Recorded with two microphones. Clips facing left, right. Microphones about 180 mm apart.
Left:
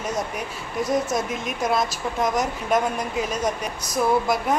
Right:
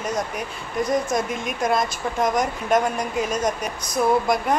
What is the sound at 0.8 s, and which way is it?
Speech, 5° left (ahead or behind).